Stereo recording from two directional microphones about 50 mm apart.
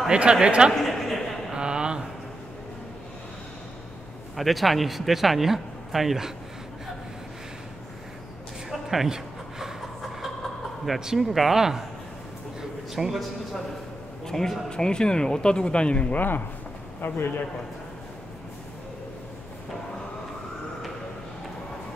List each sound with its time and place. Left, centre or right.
0.1 s speech: centre
0.7 s a sound: centre
1.5 s a sound: centre
4.4 s speech: centre
8.6 s a sound: centre
10.9 s speech: centre
12.9 s speech: centre
14.2 s speech: centre
16.2 s speech: left
17.0 s a man's voice: left